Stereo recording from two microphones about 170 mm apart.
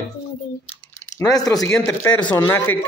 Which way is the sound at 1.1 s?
20° left (ahead or behind).